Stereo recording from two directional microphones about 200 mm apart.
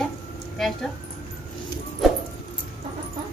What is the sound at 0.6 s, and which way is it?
Speech, centre (ahead or behind).